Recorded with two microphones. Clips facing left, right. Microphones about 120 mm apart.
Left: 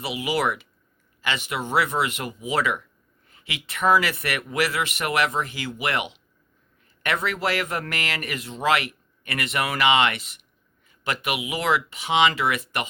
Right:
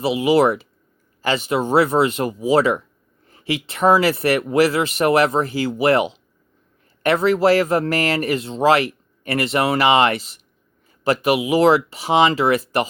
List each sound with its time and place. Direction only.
0.0 s speech: 30° right (ahead or behind)